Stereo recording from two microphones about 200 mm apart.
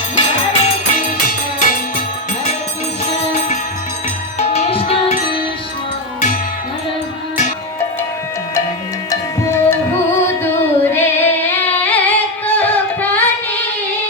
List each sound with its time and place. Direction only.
0.6 s music: 45° left (ahead or behind)
4.4 s music: 30° left (ahead or behind)
9.0 s music: 10° left (ahead or behind)